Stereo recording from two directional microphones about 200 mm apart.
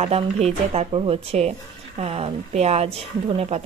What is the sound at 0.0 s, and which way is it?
A woman's voice, 30° right (ahead or behind).